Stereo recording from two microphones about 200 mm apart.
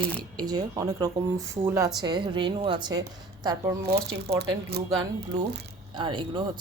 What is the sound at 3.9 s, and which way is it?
Speech, 55° right (ahead or behind).